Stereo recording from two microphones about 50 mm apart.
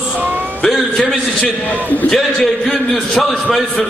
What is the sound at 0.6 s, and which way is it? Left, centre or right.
A man's voice, centre.